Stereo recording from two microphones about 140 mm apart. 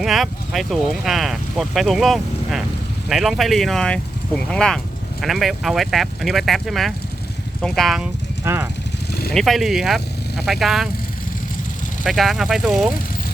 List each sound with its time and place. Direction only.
0.0 s speech: centre (ahead or behind)
8.4 s speech: 20° right (ahead or behind)
9.3 s speech: centre (ahead or behind)
12.0 s speech: centre (ahead or behind)